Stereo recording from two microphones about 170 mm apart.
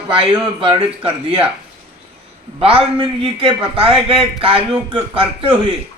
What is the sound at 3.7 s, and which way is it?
Speech, 30° right (ahead or behind).